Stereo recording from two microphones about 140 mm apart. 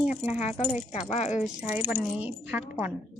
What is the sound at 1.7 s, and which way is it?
A woman's voice, 15° right (ahead or behind).